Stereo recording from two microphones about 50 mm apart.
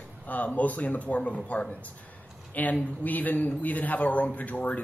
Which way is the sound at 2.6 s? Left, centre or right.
Left.